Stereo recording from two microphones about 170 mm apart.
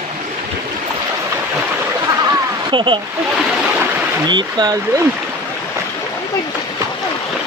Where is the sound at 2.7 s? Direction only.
30° right (ahead or behind).